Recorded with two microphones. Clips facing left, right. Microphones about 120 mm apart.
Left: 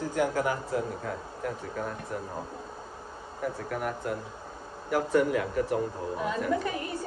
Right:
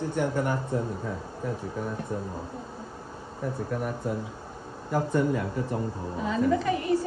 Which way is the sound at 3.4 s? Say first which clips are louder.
Right 1 dB; 85° left.